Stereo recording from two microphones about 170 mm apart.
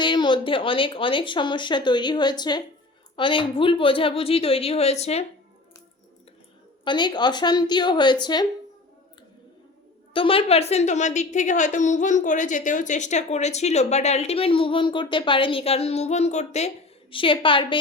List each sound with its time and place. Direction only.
0.0 s a woman's voice: 25° left (ahead or behind)
6.8 s speech: 25° left (ahead or behind)
10.1 s a woman's voice: 30° left (ahead or behind)